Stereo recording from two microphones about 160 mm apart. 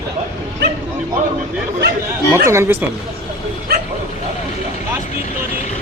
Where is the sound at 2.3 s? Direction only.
15° right (ahead or behind).